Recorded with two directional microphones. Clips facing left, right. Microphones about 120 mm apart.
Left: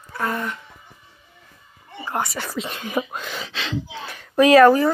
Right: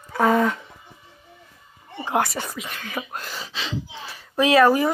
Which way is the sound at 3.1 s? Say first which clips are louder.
Left 2 dB; 5° right (ahead or behind).